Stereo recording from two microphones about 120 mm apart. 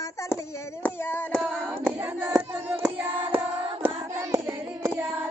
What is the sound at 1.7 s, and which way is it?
Child singing, 15° right (ahead or behind).